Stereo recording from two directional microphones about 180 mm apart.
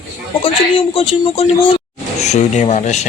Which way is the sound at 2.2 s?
40° left (ahead or behind).